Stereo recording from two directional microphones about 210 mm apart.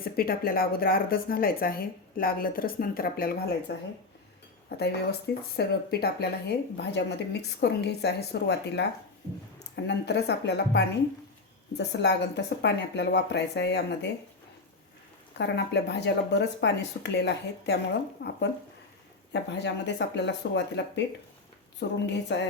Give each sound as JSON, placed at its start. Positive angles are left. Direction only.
{"t": 0.0, "sound": "a woman's voice", "side_deg": 45}
{"t": 4.8, "sound": "a woman's voice", "side_deg": 50}
{"t": 15.4, "sound": "a woman's voice", "side_deg": 55}